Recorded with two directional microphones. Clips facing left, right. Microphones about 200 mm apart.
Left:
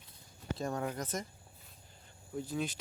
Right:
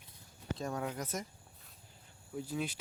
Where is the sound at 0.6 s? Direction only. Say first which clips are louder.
Left 2 dB; centre (ahead or behind).